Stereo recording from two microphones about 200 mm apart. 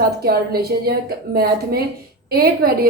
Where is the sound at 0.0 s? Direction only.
50° right (ahead or behind).